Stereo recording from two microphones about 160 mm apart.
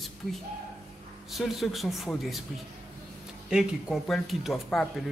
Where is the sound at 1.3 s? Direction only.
Centre (ahead or behind).